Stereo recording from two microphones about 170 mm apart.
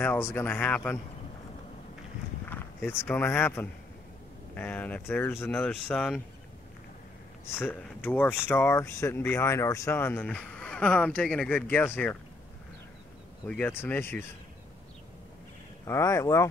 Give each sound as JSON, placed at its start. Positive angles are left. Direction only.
{"t": 0.0, "sound": "speech", "side_deg": 10}
{"t": 2.4, "sound": "speech", "side_deg": 10}
{"t": 7.5, "sound": "speech", "side_deg": 10}
{"t": 13.5, "sound": "speech", "side_deg": 10}
{"t": 15.9, "sound": "speech", "side_deg": 15}